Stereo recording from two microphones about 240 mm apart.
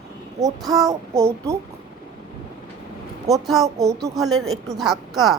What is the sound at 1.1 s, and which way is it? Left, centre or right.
Speech, centre.